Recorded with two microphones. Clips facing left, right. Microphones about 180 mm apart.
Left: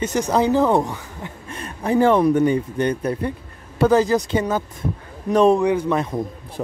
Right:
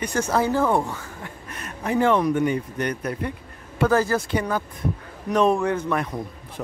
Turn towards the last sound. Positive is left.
turn(degrees=25)  # may be behind; listen again after turning